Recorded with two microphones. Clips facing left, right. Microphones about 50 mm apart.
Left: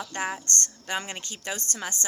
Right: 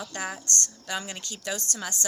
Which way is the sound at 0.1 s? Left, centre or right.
Left.